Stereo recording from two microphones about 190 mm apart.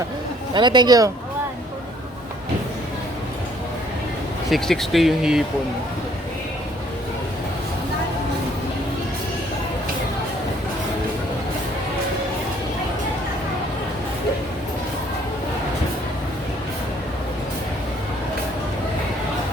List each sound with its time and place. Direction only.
0.5 s speech: 25° right (ahead or behind)
4.4 s speech: centre (ahead or behind)